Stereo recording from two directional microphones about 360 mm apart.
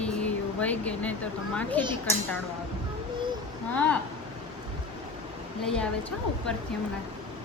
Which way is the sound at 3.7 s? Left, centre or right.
Centre.